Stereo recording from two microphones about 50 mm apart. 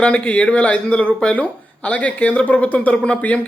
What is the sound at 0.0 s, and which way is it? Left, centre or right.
Speech, left.